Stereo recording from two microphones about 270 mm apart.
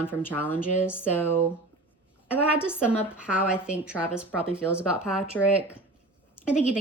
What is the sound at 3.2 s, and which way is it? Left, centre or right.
A woman's voice, centre.